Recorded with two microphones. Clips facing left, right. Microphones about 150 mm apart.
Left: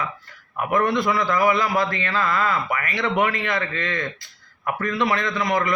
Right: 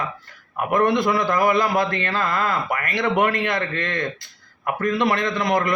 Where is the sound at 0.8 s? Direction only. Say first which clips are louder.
Right 3 dB; 20° right (ahead or behind).